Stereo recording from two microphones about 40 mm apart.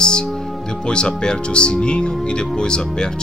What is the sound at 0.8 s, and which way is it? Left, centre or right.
Speech, left.